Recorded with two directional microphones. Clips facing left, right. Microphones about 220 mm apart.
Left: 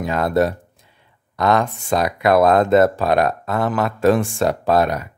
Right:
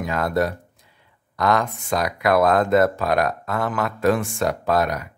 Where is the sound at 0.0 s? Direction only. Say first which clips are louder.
Left 4 dB; 25° left (ahead or behind).